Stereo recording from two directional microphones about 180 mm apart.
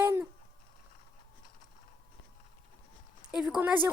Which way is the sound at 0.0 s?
10° right (ahead or behind).